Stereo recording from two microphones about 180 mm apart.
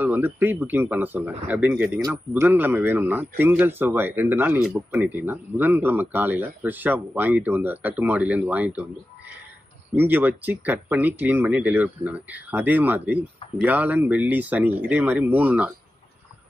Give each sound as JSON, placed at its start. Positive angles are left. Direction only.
{"t": 0.0, "sound": "a man's voice", "side_deg": -10}
{"t": 2.4, "sound": "speech", "side_deg": -10}
{"t": 9.9, "sound": "speech", "side_deg": -10}